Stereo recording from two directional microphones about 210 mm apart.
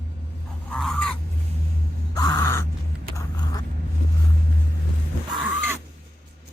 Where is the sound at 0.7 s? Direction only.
5° left (ahead or behind).